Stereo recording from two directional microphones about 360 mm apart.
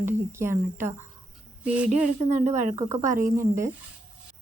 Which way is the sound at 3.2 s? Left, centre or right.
Centre.